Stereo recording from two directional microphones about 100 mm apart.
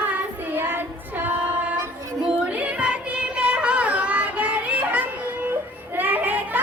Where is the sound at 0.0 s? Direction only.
20° right (ahead or behind).